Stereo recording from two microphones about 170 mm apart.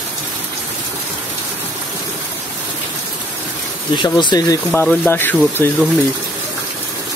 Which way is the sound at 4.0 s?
25° left (ahead or behind).